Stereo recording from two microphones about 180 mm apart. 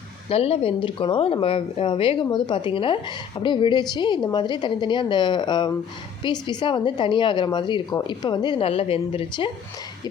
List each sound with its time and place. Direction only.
0.3 s speech: 35° left (ahead or behind)